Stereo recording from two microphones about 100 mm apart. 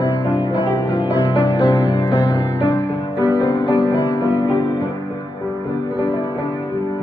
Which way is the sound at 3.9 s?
30° left (ahead or behind).